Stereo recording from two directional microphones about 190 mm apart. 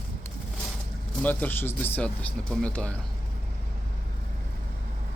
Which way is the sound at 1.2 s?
10° left (ahead or behind).